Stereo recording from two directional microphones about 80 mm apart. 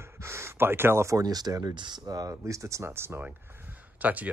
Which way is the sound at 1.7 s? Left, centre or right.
Right.